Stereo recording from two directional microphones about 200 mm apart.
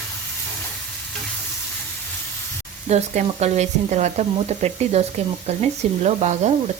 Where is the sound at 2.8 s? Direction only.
35° right (ahead or behind).